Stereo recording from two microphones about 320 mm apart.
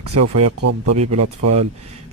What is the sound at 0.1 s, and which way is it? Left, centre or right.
Speech, right.